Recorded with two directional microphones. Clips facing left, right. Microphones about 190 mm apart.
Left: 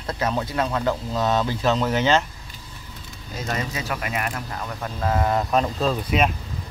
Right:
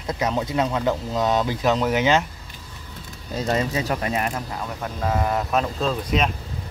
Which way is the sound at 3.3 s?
30° right (ahead or behind).